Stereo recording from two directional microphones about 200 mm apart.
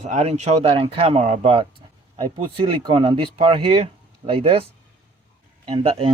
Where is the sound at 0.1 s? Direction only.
35° right (ahead or behind).